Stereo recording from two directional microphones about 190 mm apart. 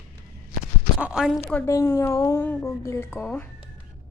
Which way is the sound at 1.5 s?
10° left (ahead or behind).